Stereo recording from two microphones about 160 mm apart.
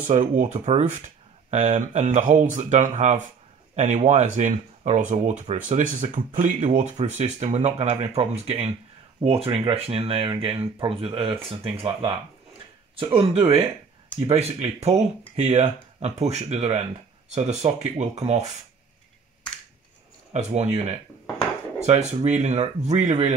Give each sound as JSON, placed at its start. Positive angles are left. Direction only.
{"t": 0.0, "sound": "speech", "side_deg": -50}
{"t": 20.3, "sound": "speech", "side_deg": -45}